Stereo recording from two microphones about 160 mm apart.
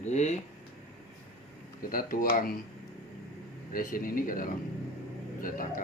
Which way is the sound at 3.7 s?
60° left (ahead or behind).